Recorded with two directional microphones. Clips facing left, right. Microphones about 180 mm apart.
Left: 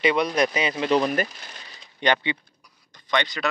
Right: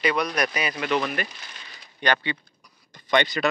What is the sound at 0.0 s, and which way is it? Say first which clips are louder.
Speech: left 3 dB; 25° left (ahead or behind).